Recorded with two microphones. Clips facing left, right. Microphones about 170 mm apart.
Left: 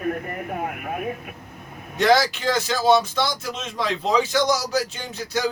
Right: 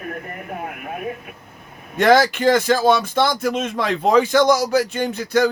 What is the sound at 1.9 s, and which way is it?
Speech, 55° right (ahead or behind).